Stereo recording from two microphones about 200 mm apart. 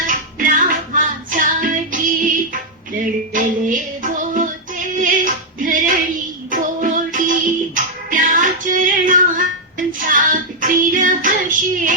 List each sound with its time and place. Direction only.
0.0 s music: 40° right (ahead or behind)
4.9 s female singing: 40° right (ahead or behind)
8.1 s music: 40° right (ahead or behind)